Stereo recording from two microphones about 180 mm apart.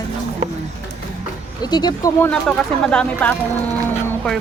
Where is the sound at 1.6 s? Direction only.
25° left (ahead or behind).